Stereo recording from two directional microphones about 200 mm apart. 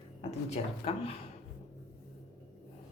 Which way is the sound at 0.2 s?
30° left (ahead or behind).